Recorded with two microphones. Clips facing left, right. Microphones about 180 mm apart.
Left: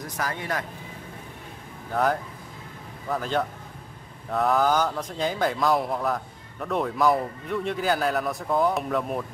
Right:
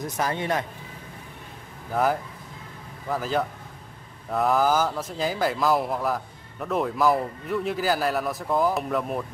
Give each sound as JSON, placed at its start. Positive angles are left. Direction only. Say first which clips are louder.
{"t": 0.0, "sound": "speech", "louder": "right 4 dB", "side_deg": -25}
{"t": 3.1, "sound": "speech", "louder": "right 1 dB", "side_deg": -5}